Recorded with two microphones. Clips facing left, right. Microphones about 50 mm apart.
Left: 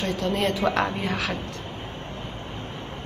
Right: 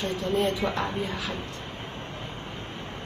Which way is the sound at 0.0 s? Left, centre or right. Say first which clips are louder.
Left 1 dB; left.